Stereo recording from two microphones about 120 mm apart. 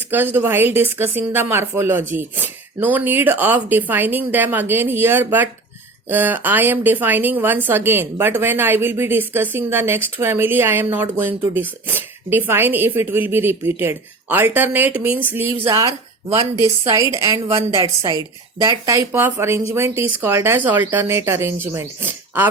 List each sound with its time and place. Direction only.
0.1 s a woman's voice: 15° right (ahead or behind)
15.6 s a woman's voice: 30° right (ahead or behind)